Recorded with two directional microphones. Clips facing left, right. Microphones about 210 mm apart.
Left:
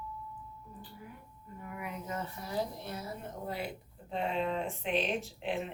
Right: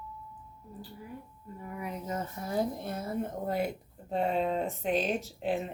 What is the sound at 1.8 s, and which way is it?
A woman's voice, 35° right (ahead or behind).